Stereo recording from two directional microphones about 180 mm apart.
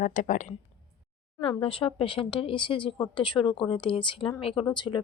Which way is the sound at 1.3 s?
30° left (ahead or behind).